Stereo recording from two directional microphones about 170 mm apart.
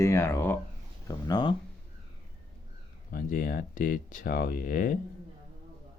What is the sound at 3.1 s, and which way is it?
Speech, 55° left (ahead or behind).